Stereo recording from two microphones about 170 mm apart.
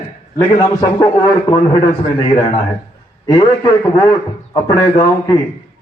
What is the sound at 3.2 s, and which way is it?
Speech, 20° left (ahead or behind).